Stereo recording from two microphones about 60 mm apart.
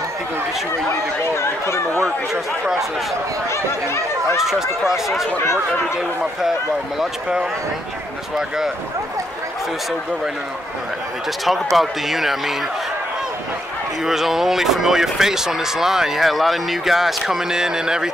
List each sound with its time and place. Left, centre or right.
0.8 s speech: left
3.4 s speech: left
4.4 s a man's voice: centre
7.0 s speech: centre
11.4 s a man's voice: centre
14.0 s speech: centre